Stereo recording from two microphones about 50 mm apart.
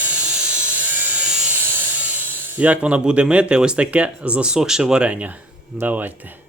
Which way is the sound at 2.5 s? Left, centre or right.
Right.